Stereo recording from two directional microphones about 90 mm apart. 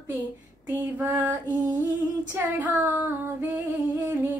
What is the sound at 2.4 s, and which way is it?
Female singing, 20° right (ahead or behind).